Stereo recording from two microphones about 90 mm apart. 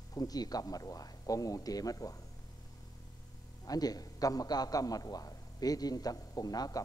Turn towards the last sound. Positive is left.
turn(degrees=45)  # may be behind; listen again after turning